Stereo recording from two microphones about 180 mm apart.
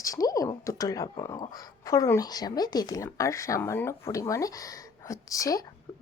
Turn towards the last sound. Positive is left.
turn(degrees=20)  # may be behind; listen again after turning